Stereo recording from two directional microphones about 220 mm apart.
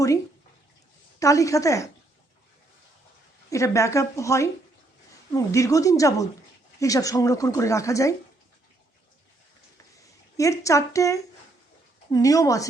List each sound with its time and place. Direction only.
1.2 s speech: 15° left (ahead or behind)
3.5 s speech: 15° left (ahead or behind)
10.3 s speech: 15° left (ahead or behind)